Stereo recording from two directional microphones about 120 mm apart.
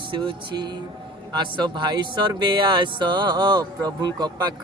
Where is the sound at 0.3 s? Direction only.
35° right (ahead or behind).